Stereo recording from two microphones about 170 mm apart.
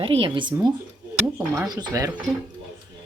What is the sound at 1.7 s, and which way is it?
Speech, 20° right (ahead or behind).